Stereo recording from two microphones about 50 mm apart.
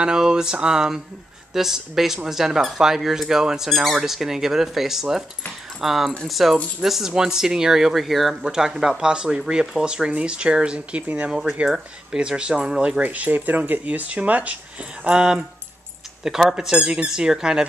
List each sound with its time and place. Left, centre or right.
0.0 s speech: centre
8.4 s speech: centre
11.6 s speech: centre
13.0 s speech: right
16.3 s speech: centre